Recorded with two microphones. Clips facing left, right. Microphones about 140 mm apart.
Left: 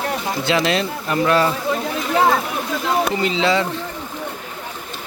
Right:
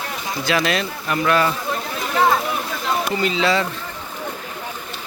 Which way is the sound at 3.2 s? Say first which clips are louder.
Left 1 dB; 20° left (ahead or behind).